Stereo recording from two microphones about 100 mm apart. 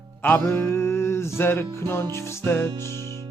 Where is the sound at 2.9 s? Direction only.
40° right (ahead or behind).